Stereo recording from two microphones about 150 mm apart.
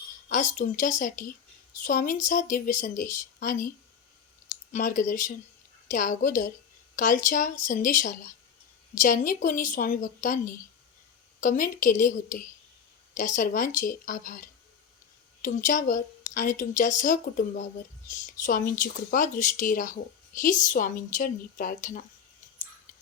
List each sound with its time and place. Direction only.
0.3 s a woman's voice: 55° left (ahead or behind)
4.7 s a woman's voice: 60° left (ahead or behind)